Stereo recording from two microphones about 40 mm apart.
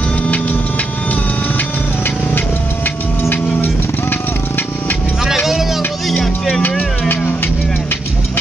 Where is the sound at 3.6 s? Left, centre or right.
Left.